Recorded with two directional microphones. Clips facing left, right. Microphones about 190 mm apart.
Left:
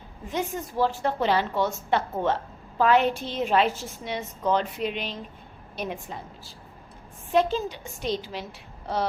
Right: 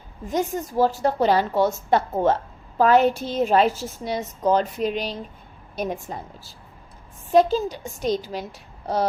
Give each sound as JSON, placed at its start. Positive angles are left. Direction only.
{"t": 0.3, "sound": "a woman's voice", "side_deg": -40}